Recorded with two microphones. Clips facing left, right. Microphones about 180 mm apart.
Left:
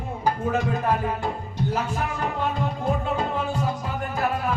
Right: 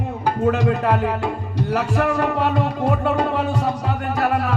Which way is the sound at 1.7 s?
70° right (ahead or behind).